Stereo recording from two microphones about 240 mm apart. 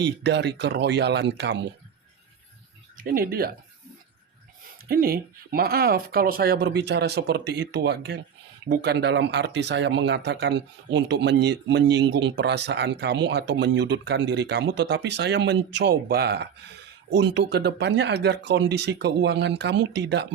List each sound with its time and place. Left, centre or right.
0.0 s speech: right
3.0 s speech: right
4.9 s speech: right